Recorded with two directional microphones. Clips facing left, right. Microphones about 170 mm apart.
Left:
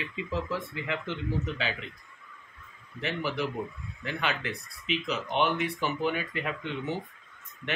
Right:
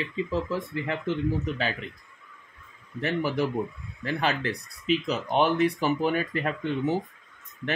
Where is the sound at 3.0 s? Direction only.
45° right (ahead or behind).